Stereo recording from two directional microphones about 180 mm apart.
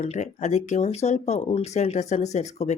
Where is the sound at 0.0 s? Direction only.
40° left (ahead or behind).